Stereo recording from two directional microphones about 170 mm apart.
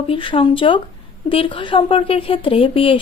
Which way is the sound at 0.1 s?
30° left (ahead or behind).